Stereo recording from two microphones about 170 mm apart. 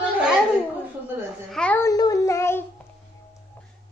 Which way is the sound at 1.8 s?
20° left (ahead or behind).